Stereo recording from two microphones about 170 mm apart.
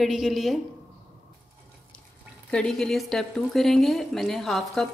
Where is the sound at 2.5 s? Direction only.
5° left (ahead or behind).